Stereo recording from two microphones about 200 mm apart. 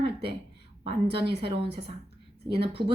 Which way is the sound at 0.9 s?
25° right (ahead or behind).